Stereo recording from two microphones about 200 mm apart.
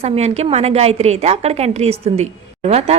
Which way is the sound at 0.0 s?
30° right (ahead or behind).